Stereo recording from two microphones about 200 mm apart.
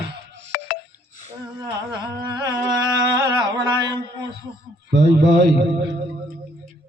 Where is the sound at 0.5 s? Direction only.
40° left (ahead or behind).